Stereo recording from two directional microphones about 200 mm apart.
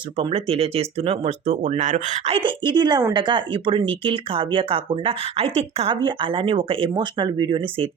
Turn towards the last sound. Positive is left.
turn(degrees=-25)  # may be behind; listen again after turning